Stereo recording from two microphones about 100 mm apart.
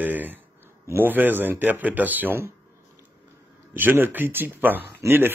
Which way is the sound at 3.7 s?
20° right (ahead or behind).